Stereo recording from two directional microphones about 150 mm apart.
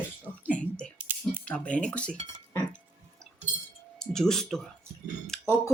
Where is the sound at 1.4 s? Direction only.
10° left (ahead or behind).